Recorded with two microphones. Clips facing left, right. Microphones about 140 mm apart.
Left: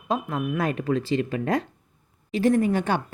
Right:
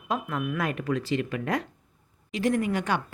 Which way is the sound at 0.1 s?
25° left (ahead or behind).